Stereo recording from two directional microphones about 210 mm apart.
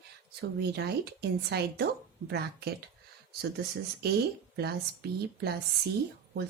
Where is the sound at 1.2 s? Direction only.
50° right (ahead or behind).